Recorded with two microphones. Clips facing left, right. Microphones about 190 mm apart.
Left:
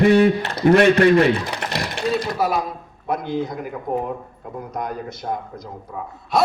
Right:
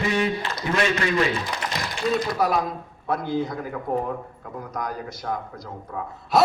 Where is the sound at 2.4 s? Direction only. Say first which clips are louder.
Even; centre (ahead or behind).